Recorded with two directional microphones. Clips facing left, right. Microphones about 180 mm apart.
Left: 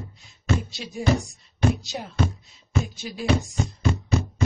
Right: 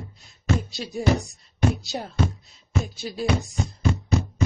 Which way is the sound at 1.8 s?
35° right (ahead or behind).